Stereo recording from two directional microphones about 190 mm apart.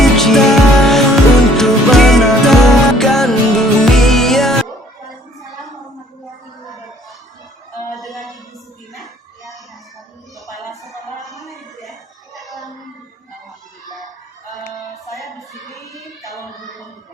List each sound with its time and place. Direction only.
0.0 s music: centre (ahead or behind)
7.9 s music: centre (ahead or behind)
9.0 s a sound: centre (ahead or behind)
13.8 s a sound: 20° left (ahead or behind)
15.1 s music: centre (ahead or behind)
16.6 s music: centre (ahead or behind)